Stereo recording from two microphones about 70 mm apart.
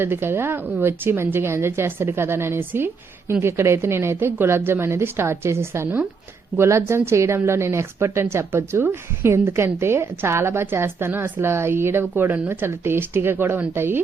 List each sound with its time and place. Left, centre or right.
0.0 s speech: right